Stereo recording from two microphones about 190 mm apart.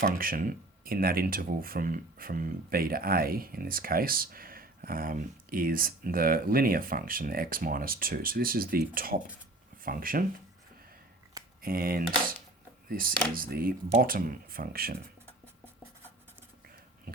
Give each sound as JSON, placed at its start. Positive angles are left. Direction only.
{"t": 0.0, "sound": "speech", "side_deg": -50}
{"t": 11.6, "sound": "speech", "side_deg": -50}
{"t": 15.3, "sound": "writing", "side_deg": -10}